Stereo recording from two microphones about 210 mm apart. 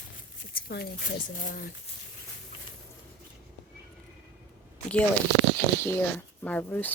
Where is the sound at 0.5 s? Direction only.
50° left (ahead or behind).